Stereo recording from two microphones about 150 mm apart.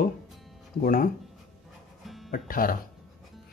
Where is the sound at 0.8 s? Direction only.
65° left (ahead or behind).